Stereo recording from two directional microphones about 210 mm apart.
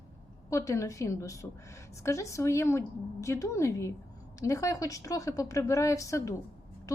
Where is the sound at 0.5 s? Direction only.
15° left (ahead or behind).